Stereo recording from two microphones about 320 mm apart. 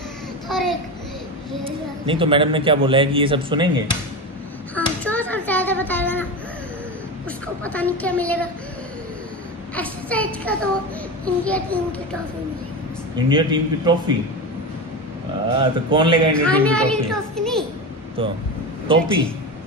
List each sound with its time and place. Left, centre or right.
0.5 s a child's voice: centre
1.6 s speech: centre
4.7 s a sound: centre
7.6 s speech: centre
9.8 s speech: centre
13.3 s speech: centre
15.4 s speech: centre
16.4 s speech: centre
18.2 s speech: centre